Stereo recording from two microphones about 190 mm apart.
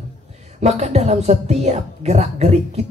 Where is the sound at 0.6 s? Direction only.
35° right (ahead or behind).